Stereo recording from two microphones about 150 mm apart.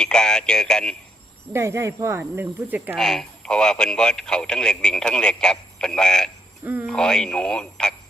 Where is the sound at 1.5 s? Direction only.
20° right (ahead or behind).